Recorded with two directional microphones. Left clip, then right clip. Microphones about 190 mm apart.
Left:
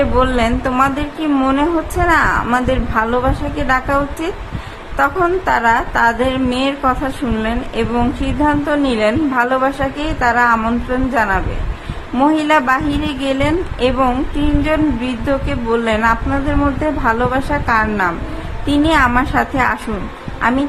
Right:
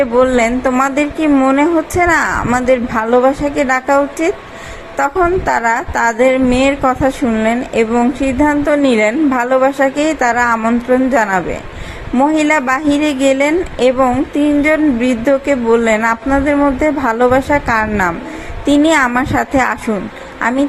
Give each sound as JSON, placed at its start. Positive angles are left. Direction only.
{"t": 0.0, "sound": "speech", "side_deg": -20}